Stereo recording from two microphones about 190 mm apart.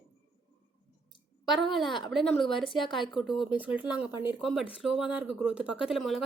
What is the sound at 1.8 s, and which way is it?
Speech, 25° left (ahead or behind).